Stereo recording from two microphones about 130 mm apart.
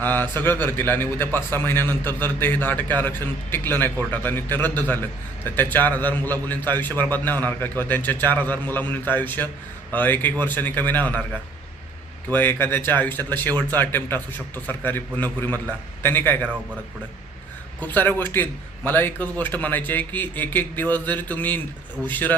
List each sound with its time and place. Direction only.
0.0 s a man's voice: 15° left (ahead or behind)
12.3 s a man's voice: 15° left (ahead or behind)
17.7 s a man's voice: 15° left (ahead or behind)